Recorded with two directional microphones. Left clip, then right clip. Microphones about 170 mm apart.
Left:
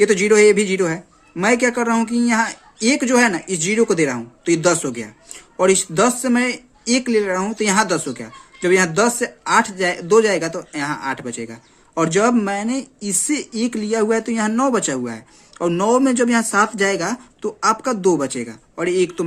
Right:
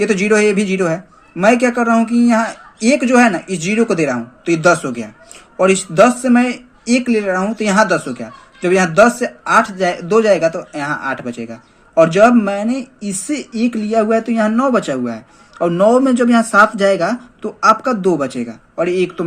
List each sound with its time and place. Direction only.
0.0 s speech: 40° left (ahead or behind)